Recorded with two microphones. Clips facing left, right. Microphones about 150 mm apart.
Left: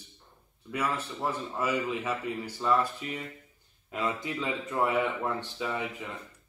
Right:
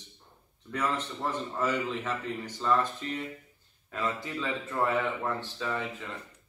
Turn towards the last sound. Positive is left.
turn(degrees=15)  # may be behind; listen again after turning